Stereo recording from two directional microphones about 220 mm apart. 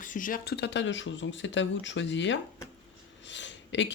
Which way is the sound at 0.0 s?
35° left (ahead or behind).